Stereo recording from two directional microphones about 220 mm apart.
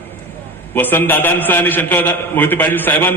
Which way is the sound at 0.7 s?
10° left (ahead or behind).